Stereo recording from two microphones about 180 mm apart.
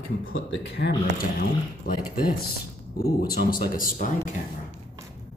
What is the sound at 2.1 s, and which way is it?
Speech, 55° left (ahead or behind).